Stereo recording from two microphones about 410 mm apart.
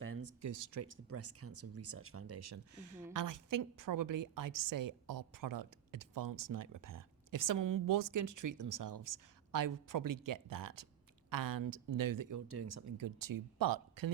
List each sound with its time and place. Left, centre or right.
0.0 s a sound: right
0.9 s a woman's voice: right
12.5 s a woman's voice: right